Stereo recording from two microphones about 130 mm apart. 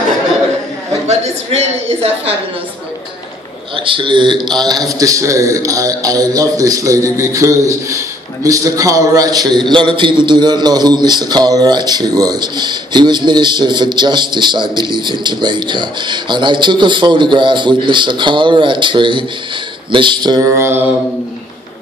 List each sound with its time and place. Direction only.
1.0 s a woman's voice: 55° right (ahead or behind)
3.7 s a man's voice: 40° right (ahead or behind)
20.4 s mantra: 20° right (ahead or behind)